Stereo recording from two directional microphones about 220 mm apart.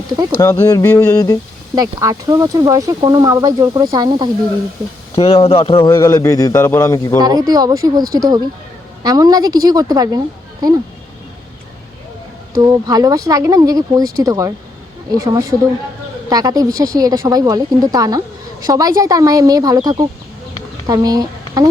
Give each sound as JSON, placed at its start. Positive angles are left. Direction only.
{"t": 0.3, "sound": "speech", "side_deg": 10}
{"t": 1.7, "sound": "speech", "side_deg": -15}
{"t": 5.1, "sound": "speech", "side_deg": 25}
{"t": 5.9, "sound": "speech", "side_deg": 15}
{"t": 7.2, "sound": "speech", "side_deg": -15}
{"t": 12.5, "sound": "speech", "side_deg": -15}